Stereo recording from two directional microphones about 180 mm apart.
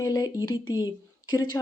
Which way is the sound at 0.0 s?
20° left (ahead or behind).